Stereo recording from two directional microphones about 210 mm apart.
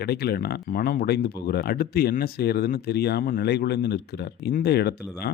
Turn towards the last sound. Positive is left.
turn(degrees=50)  # may be behind; listen again after turning